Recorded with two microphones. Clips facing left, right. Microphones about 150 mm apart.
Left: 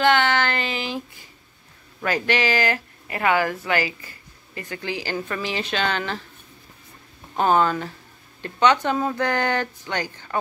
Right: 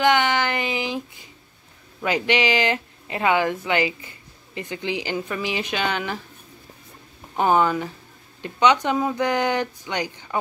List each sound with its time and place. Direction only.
0.0 s a sound: 15° right (ahead or behind)
2.0 s speech: 15° right (ahead or behind)
7.3 s speech: 15° right (ahead or behind)